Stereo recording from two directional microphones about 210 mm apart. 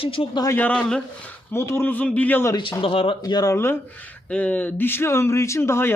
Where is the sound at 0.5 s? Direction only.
5° left (ahead or behind).